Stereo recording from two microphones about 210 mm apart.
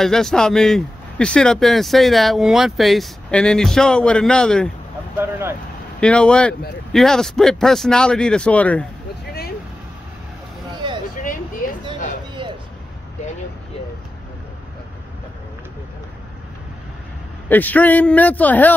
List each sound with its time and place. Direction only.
0.0 s speech: centre (ahead or behind)
5.2 s vehicle: 10° right (ahead or behind)
5.9 s speech: 5° left (ahead or behind)
11.6 s a sound: 40° left (ahead or behind)
17.5 s speech: 10° left (ahead or behind)